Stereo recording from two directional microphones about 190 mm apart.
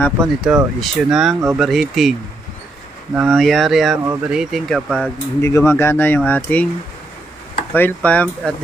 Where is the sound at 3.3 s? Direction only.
Centre (ahead or behind).